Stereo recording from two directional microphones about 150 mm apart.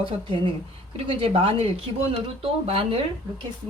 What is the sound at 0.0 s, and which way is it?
Speech, 35° right (ahead or behind).